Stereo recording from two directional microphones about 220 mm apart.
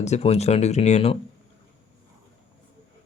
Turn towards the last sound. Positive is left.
turn(degrees=30)  # may be behind; listen again after turning